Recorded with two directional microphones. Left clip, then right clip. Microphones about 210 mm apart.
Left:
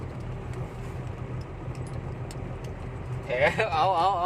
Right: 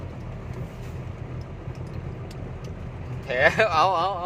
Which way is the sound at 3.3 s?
30° right (ahead or behind).